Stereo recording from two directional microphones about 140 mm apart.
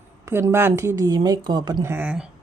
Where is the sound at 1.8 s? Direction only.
15° right (ahead or behind).